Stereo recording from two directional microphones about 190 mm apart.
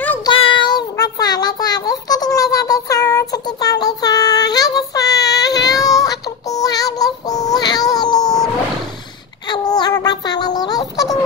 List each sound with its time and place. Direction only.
0.0 s child singing: 10° left (ahead or behind)
0.3 s child singing: 25° left (ahead or behind)
9.5 s a sound: 20° left (ahead or behind)